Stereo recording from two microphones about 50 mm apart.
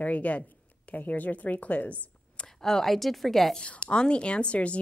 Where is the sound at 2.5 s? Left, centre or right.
Centre.